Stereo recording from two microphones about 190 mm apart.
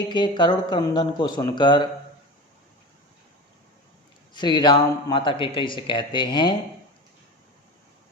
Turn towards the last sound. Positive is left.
turn(degrees=25)  # may be behind; listen again after turning